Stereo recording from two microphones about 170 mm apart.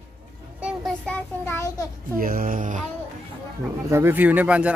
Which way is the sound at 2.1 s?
55° right (ahead or behind).